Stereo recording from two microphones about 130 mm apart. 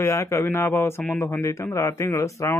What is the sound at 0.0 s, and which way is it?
Speech, 20° left (ahead or behind).